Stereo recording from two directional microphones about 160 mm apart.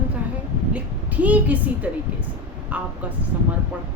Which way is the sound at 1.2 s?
10° right (ahead or behind).